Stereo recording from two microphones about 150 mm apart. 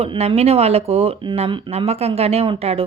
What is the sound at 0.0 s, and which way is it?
Speech, 40° right (ahead or behind).